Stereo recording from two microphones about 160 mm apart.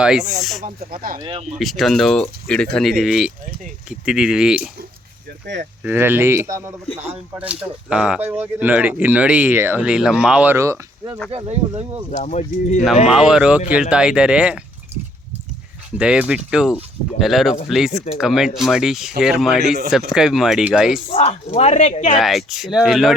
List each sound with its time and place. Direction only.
0.0 s speech: 5° right (ahead or behind)
0.6 s speech: 60° right (ahead or behind)
1.2 s speech: 35° right (ahead or behind)
1.5 s speech: centre (ahead or behind)
5.8 s speech: 15° right (ahead or behind)
11.3 s speech: 40° right (ahead or behind)
12.1 s speech: 45° left (ahead or behind)
13.1 s speech: 5° right (ahead or behind)
16.0 s speech: 5° right (ahead or behind)
21.1 s speech: 40° left (ahead or behind)
22.2 s speech: centre (ahead or behind)